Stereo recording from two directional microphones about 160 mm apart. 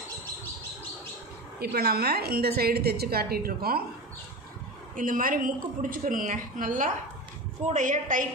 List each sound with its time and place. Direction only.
1.6 s a woman's voice: 80° right
4.9 s a woman's voice: 60° right (ahead or behind)